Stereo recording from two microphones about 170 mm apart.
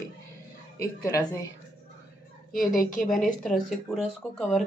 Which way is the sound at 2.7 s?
50° left (ahead or behind).